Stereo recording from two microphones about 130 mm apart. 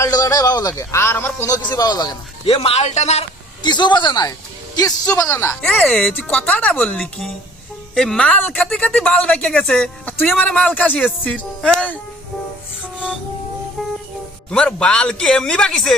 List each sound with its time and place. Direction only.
0.0 s speech: 25° left (ahead or behind)
2.5 s a man's voice: 50° left (ahead or behind)
3.6 s a woman's voice: 35° left (ahead or behind)
5.6 s speech: 5° left (ahead or behind)
14.5 s speech: 5° left (ahead or behind)